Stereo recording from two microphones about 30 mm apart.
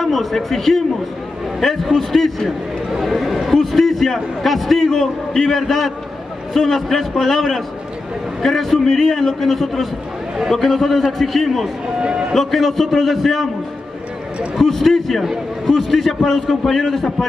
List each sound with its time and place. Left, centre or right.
0.0 s a man's voice: centre
3.0 s chatter: centre
3.5 s a sound: centre
3.9 s a man's voice: centre
12.0 s a sound: right
12.4 s a man's voice: centre
14.6 s a man's voice: centre
15.2 s a man's voice: centre